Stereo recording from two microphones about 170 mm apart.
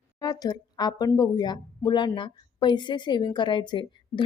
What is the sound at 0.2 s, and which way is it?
Speech, 25° left (ahead or behind).